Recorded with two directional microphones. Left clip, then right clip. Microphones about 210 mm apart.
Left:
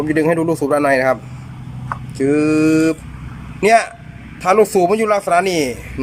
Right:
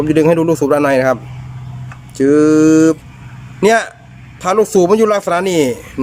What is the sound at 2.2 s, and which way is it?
Speech, 15° right (ahead or behind).